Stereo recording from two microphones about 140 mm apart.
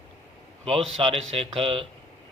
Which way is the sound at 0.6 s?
40° right (ahead or behind).